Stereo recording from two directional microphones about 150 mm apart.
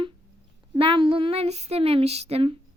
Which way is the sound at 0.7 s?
35° right (ahead or behind).